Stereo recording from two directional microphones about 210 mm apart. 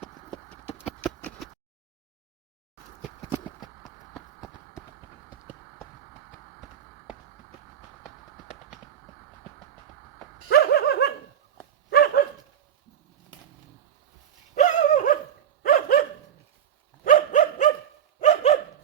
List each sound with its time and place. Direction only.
0.9 s clip-clop: centre (ahead or behind)
3.6 s clip-clop: centre (ahead or behind)
10.5 s a sound: 50° left (ahead or behind)
11.9 s dog: 50° left (ahead or behind)
14.5 s a sound: 35° left (ahead or behind)
15.6 s dog: 40° left (ahead or behind)